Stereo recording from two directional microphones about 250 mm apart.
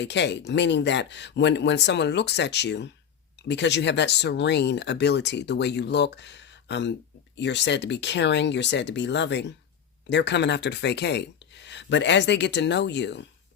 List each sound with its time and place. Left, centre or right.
0.0 s speech: left